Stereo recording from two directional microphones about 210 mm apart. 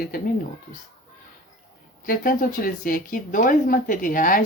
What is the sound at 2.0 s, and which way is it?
Speech, 40° left (ahead or behind).